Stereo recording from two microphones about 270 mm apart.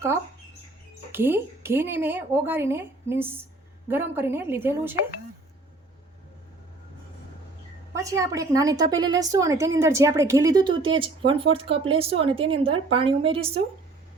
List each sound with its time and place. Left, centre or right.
1.1 s a woman's voice: centre
7.9 s a woman's voice: centre